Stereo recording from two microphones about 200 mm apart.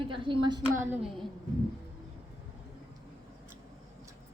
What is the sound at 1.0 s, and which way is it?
Speech, centre (ahead or behind).